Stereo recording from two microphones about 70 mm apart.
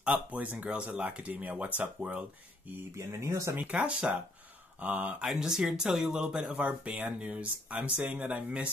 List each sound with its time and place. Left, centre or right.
0.0 s speech: right
3.0 s speech: right
3.5 s speech: right
5.2 s speech: centre
6.5 s speech: right